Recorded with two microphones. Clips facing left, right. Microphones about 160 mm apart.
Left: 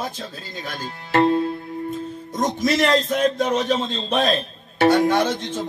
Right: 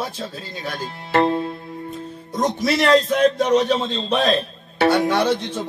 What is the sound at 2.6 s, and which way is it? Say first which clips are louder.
A man's voice: right 3 dB; 45° left (ahead or behind).